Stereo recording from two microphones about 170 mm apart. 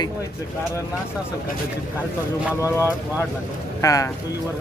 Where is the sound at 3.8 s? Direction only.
20° left (ahead or behind).